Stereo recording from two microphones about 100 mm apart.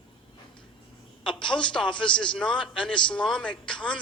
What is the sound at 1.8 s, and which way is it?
Speech, 55° left (ahead or behind).